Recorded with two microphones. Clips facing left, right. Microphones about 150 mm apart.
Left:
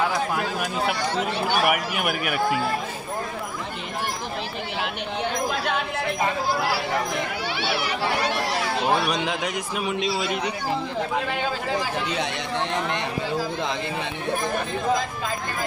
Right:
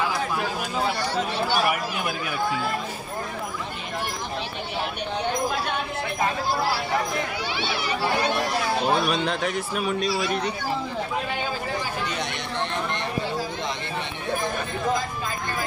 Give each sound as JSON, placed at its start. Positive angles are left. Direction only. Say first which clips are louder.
{"t": 1.7, "sound": "speech", "louder": "left 2 dB", "side_deg": 70}
{"t": 9.1, "sound": "a man's voice", "louder": "right 1 dB", "side_deg": 15}